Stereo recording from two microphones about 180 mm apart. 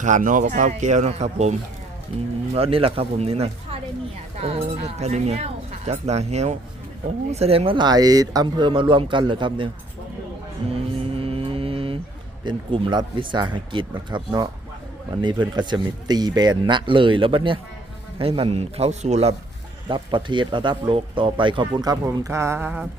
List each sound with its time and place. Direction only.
0.0 s speech: 45° right (ahead or behind)
2.6 s speech: 30° right (ahead or behind)
11.1 s music: 30° right (ahead or behind)
12.5 s speech: 25° right (ahead or behind)
19.9 s speech: 25° right (ahead or behind); by 22.9 s 10° right (ahead or behind)